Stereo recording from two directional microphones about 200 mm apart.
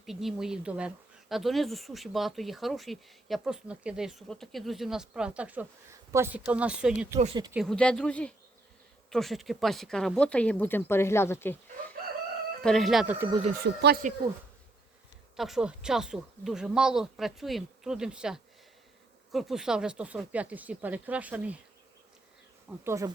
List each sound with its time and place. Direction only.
0.0 s speech: centre (ahead or behind)
12.6 s speech: centre (ahead or behind)
13.2 s speech: 25° right (ahead or behind)
13.5 s speech: 50° right (ahead or behind)
15.4 s speech: centre (ahead or behind)
22.8 s speech: 15° right (ahead or behind)